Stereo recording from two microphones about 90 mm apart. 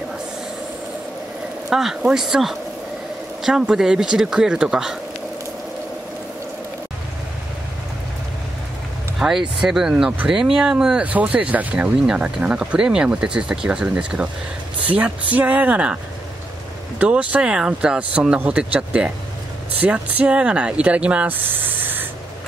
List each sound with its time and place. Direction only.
1.7 s speech: 5° right (ahead or behind)
9.2 s speech: 10° right (ahead or behind)
17.0 s speech: 15° right (ahead or behind)